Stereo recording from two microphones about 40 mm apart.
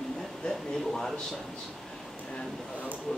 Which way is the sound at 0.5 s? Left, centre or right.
Centre.